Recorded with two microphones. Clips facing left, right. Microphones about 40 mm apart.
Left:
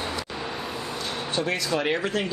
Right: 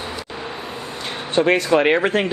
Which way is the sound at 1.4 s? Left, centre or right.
Right.